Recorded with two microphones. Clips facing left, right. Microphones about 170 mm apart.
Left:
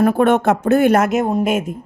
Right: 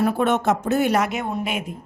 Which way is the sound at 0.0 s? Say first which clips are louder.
Left 6 dB; 55° left (ahead or behind).